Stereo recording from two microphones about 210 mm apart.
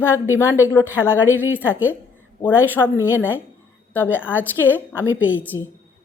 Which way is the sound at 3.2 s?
10° right (ahead or behind).